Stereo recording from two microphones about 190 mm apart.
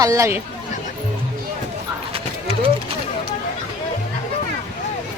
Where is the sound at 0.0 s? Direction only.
15° right (ahead or behind).